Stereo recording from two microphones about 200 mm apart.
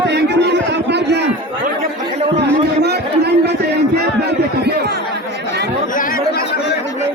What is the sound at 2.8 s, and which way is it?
Chatter, 55° right (ahead or behind).